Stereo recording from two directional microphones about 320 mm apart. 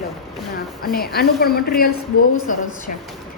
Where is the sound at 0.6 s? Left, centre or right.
Left.